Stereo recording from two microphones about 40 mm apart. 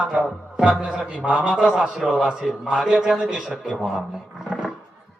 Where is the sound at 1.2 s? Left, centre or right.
Right.